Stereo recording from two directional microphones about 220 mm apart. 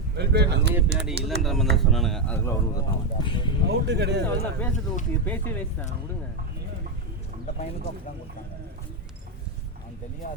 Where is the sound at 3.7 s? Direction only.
50° right (ahead or behind).